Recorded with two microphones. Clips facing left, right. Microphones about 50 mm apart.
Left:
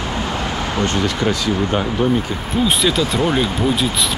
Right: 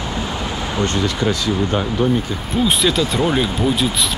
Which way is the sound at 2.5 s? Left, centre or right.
Centre.